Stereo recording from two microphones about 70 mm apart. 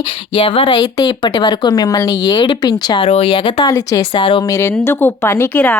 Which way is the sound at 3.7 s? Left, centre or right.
Left.